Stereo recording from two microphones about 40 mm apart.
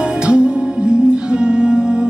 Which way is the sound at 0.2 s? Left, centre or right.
Right.